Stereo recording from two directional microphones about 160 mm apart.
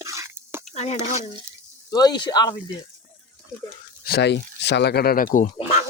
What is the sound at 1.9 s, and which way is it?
Speech, 25° left (ahead or behind).